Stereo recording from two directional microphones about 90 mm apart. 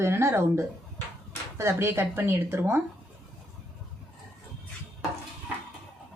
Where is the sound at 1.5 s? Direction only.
30° right (ahead or behind).